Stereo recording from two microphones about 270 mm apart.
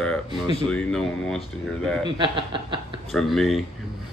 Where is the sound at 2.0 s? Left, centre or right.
Centre.